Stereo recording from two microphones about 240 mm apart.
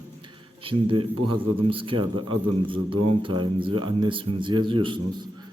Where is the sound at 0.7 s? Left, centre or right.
Right.